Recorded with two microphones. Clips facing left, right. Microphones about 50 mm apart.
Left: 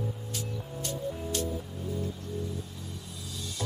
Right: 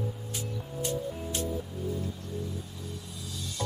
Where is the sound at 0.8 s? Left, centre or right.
Right.